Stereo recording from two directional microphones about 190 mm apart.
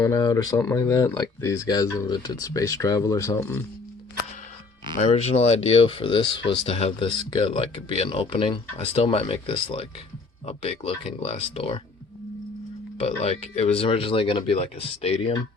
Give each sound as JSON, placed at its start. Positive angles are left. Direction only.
{"t": 0.0, "sound": "speech", "side_deg": 20}
{"t": 4.9, "sound": "speech", "side_deg": 35}
{"t": 13.0, "sound": "speech", "side_deg": 35}